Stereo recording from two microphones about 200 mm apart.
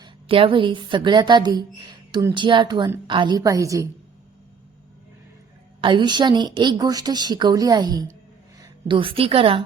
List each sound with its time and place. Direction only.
0.0 s a woman's voice: 25° right (ahead or behind)
5.8 s a woman's voice: 25° right (ahead or behind)